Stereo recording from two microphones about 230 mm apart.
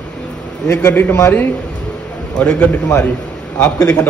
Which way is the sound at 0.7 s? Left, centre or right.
Centre.